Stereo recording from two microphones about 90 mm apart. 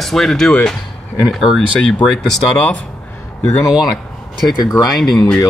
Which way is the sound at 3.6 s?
5° right (ahead or behind).